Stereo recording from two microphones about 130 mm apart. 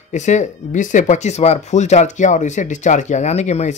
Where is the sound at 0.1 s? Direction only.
65° left (ahead or behind).